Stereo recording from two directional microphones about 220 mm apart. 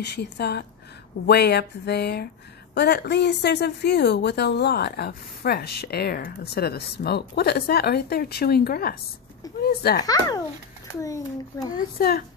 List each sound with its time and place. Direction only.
0.0 s a woman's voice: 50° left (ahead or behind)
10.0 s a child's voice: 15° left (ahead or behind)
12.0 s a woman's voice: 40° left (ahead or behind)